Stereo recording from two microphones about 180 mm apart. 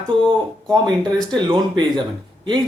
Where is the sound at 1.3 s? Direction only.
25° right (ahead or behind).